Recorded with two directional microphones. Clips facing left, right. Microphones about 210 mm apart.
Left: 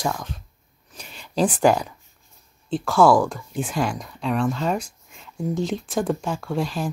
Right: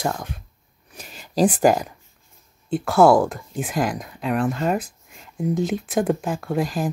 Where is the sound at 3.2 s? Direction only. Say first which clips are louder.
Even; 5° right (ahead or behind).